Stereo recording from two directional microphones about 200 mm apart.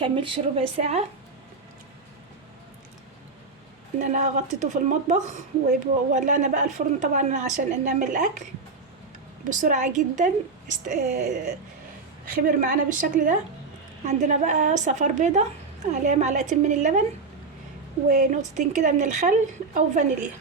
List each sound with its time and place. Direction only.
0.0 s speech: 25° right (ahead or behind)
3.9 s a woman's voice: 35° right (ahead or behind)
9.5 s a woman's voice: 40° right (ahead or behind)
12.2 s a woman's voice: 45° right (ahead or behind)
18.1 s a woman's voice: 40° right (ahead or behind)